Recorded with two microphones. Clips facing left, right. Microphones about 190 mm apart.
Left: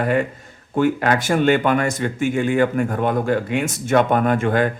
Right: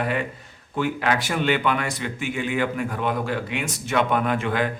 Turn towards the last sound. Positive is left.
turn(degrees=45)  # may be behind; listen again after turning